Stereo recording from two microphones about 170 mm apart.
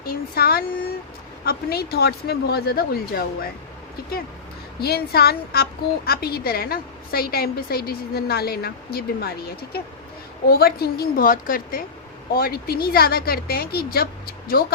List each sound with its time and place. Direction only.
0.0 s a woman's voice: 65° left (ahead or behind)
4.8 s a woman's voice: 65° left (ahead or behind)